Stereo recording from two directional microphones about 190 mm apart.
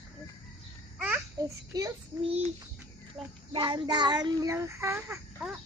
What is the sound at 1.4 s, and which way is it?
Child singing, 20° right (ahead or behind).